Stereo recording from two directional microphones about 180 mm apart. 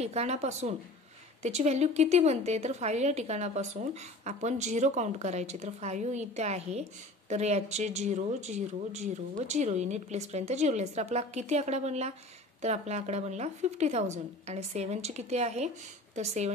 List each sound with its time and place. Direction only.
0.0 s a woman's voice: 35° right (ahead or behind)